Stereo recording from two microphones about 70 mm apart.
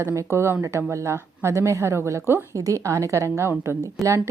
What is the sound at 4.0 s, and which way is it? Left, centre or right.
Speech, centre.